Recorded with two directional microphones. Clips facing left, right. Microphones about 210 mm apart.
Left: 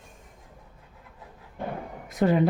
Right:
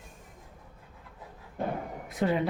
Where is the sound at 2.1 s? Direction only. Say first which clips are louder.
Left 6 dB; 45° left (ahead or behind).